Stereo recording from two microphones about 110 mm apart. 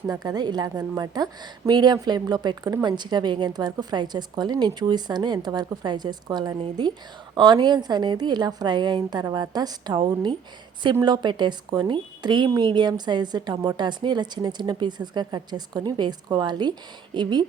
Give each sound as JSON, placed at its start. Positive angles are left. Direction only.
{"t": 0.1, "sound": "a woman's voice", "side_deg": -35}